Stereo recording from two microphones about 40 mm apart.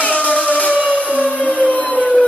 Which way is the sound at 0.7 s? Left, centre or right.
Right.